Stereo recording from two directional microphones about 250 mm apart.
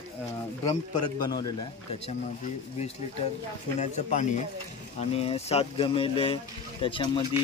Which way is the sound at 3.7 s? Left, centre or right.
Left.